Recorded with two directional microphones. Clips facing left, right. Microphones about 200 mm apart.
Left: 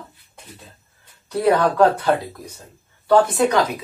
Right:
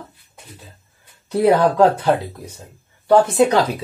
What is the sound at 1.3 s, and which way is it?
Speech, 20° right (ahead or behind).